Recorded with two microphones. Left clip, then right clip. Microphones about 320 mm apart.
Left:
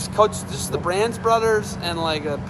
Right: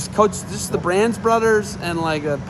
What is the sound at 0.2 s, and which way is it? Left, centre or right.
Speech, right.